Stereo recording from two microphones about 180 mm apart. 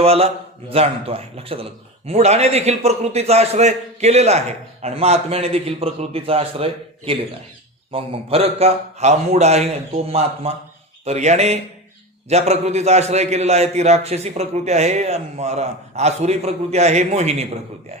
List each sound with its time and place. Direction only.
0.0 s a man's voice: 35° right (ahead or behind)